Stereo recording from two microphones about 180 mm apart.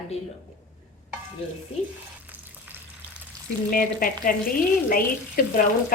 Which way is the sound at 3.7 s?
50° left (ahead or behind).